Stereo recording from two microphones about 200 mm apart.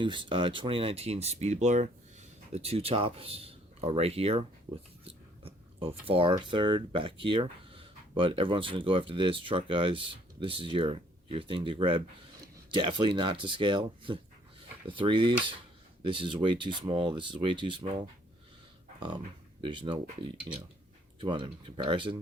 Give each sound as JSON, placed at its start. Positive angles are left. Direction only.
{"t": 0.0, "sound": "speech", "side_deg": -25}
{"t": 18.9, "sound": "speech", "side_deg": -25}